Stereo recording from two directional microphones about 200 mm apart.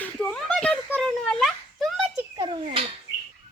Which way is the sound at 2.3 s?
20° right (ahead or behind).